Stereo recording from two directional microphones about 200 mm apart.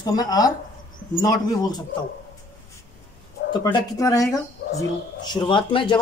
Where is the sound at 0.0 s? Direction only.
20° left (ahead or behind).